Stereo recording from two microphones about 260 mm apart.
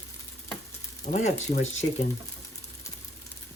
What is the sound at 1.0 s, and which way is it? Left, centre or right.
Speech, left.